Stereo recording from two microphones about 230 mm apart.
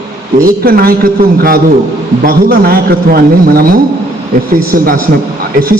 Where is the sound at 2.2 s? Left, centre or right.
Right.